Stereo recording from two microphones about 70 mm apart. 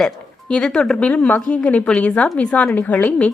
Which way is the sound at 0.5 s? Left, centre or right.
Centre.